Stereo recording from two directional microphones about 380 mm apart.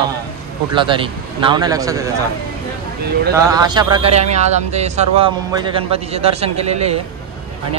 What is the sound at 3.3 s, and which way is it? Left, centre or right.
Speech, centre.